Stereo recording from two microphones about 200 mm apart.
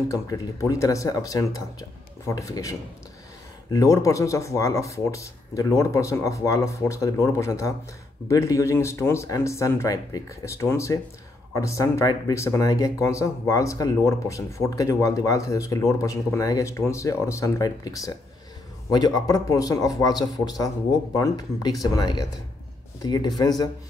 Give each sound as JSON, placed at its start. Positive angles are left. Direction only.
{"t": 0.1, "sound": "speech", "side_deg": 15}